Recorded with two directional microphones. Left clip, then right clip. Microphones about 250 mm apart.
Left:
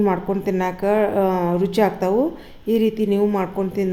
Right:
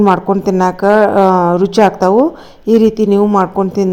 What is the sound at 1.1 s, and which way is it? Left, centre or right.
A woman's voice, right.